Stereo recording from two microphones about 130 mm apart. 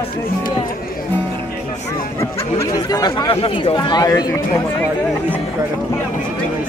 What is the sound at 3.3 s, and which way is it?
Speech, 45° left (ahead or behind).